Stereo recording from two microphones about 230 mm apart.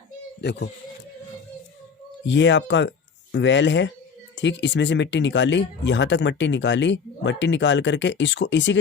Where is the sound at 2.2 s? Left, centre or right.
Left.